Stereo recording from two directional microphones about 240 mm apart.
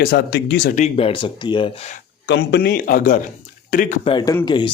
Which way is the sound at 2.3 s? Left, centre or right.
Left.